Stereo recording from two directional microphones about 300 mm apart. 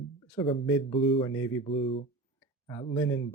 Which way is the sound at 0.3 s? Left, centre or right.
Centre.